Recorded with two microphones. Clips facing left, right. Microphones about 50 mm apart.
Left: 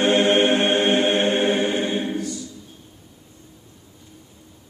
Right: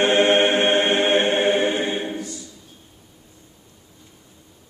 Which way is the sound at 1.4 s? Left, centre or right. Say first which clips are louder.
Right 1 dB; right.